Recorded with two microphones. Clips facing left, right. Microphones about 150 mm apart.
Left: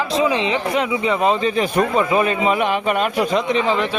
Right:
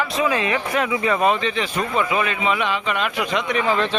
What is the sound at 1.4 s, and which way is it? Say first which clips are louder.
Speech: left 6 dB; 40° left (ahead or behind).